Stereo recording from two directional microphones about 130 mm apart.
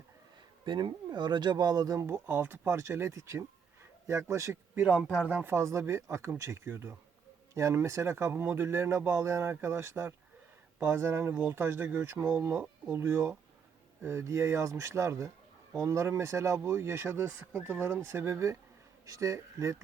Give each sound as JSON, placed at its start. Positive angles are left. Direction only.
{"t": 0.6, "sound": "a man's voice", "side_deg": -35}
{"t": 4.8, "sound": "speech", "side_deg": -10}